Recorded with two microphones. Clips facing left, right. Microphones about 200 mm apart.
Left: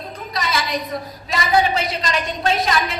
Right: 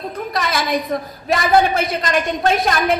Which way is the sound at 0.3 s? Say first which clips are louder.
Right 3 dB; 55° right (ahead or behind).